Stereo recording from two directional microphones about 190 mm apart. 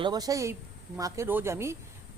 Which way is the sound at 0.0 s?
20° right (ahead or behind).